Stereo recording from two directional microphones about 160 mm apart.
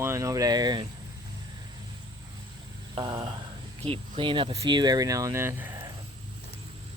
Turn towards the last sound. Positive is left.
turn(degrees=-15)  # may be behind; listen again after turning